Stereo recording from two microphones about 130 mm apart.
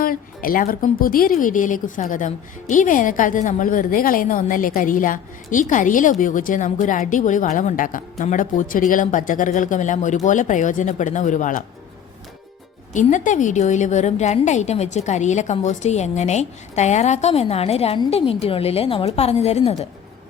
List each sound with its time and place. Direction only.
0.0 s a woman's voice: 90° left
12.9 s a woman's voice: 70° left (ahead or behind); by 19.9 s 55° left (ahead or behind)